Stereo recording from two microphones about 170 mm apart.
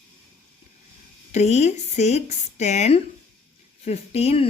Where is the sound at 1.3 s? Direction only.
40° left (ahead or behind).